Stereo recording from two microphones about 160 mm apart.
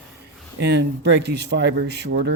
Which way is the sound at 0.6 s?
90° right.